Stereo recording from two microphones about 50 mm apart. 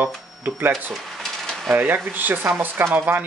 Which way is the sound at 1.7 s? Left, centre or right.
Right.